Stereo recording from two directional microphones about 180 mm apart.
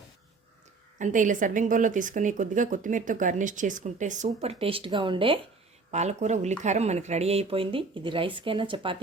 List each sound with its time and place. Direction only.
0.9 s a woman's voice: 45° right (ahead or behind); by 5.4 s 30° right (ahead or behind)
5.9 s speech: 40° right (ahead or behind)